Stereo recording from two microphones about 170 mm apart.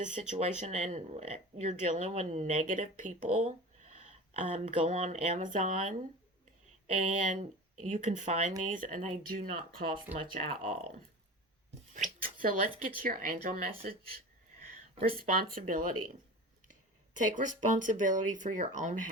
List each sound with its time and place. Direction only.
0.1 s speech: 40° right (ahead or behind)
7.2 s speech: 45° right (ahead or behind)
11.9 s a sound: 50° right (ahead or behind)
13.0 s speech: 55° right (ahead or behind)
15.3 s speech: 55° right (ahead or behind)
17.2 s speech: 50° right (ahead or behind)